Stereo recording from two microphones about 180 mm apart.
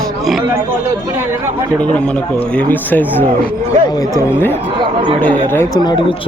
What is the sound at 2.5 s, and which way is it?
Speech, 10° left (ahead or behind).